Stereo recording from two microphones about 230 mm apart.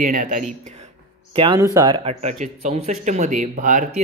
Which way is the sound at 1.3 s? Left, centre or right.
Right.